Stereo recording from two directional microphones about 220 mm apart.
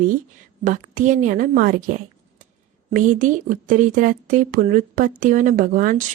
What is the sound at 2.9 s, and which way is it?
Speech, 35° right (ahead or behind).